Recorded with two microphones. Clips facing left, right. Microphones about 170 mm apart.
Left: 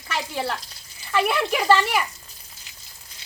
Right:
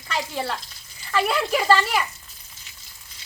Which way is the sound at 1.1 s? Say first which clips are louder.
Even; 5° left (ahead or behind).